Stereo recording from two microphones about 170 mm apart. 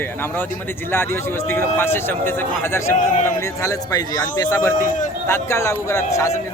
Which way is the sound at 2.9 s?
50° left (ahead or behind).